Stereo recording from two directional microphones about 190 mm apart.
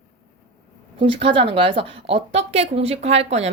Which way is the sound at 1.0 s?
30° right (ahead or behind).